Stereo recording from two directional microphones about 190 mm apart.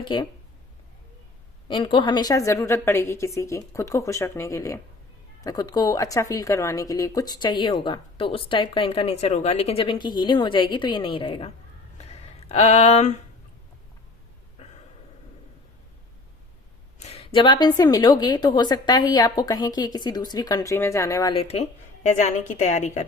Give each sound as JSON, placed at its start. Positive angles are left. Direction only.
{"t": 0.0, "sound": "speech", "side_deg": 25}
{"t": 1.6, "sound": "a woman's voice", "side_deg": 25}
{"t": 11.9, "sound": "a sound", "side_deg": 35}
{"t": 14.6, "sound": "a sound", "side_deg": 35}
{"t": 17.0, "sound": "speech", "side_deg": 30}
{"t": 21.4, "sound": "a woman's voice", "side_deg": 35}